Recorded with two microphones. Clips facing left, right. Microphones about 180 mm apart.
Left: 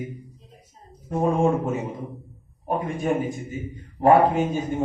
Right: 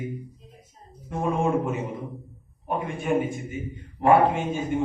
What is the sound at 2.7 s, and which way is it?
Speech, 40° left (ahead or behind).